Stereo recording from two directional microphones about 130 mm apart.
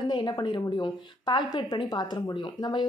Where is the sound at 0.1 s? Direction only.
35° left (ahead or behind).